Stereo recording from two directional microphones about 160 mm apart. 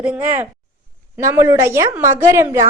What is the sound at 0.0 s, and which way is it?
A woman's voice, 10° right (ahead or behind).